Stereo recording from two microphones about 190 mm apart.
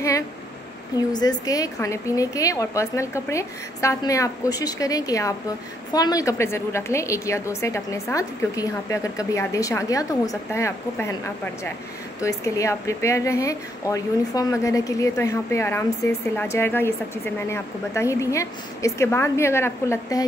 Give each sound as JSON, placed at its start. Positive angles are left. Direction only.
{"t": 1.1, "sound": "a woman's voice", "side_deg": 20}